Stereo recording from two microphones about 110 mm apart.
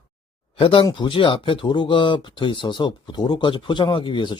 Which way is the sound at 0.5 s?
55° left (ahead or behind).